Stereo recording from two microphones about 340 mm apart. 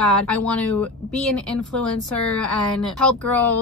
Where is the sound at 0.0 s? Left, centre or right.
Centre.